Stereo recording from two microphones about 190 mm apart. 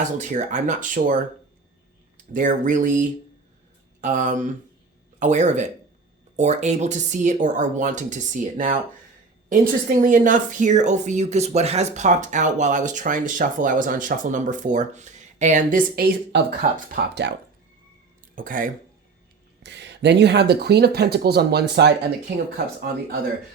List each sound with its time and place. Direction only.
0.0 s a woman's voice: 40° right (ahead or behind)
2.1 s a woman's voice: 45° right (ahead or behind); by 17.3 s 60° right (ahead or behind)
18.3 s speech: 45° right (ahead or behind)
19.6 s speech: 65° right (ahead or behind)